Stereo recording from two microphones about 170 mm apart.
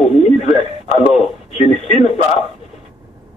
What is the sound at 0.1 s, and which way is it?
Radio, 40° left (ahead or behind).